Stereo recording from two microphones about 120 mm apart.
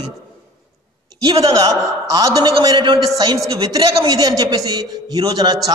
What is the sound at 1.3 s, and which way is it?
A woman's voice, 30° right (ahead or behind).